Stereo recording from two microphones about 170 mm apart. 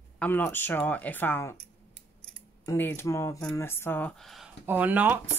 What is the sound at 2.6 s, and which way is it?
Speech, 10° left (ahead or behind).